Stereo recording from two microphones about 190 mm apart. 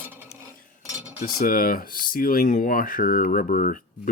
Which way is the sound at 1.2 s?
50° left (ahead or behind).